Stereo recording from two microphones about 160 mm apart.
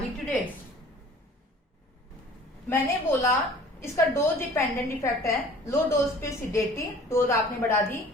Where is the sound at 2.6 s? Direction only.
15° left (ahead or behind).